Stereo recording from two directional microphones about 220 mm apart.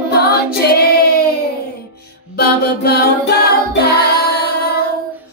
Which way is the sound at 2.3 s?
45° left (ahead or behind).